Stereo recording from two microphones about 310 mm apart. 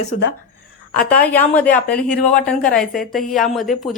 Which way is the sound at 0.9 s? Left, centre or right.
Centre.